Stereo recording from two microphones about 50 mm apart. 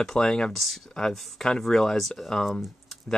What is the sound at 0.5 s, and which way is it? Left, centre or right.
Speech, centre.